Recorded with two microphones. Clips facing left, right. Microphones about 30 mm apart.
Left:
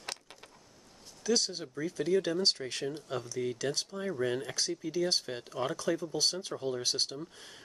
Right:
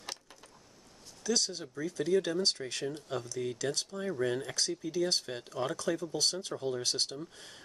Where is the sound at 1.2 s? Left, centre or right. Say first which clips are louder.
Left 2 dB; left.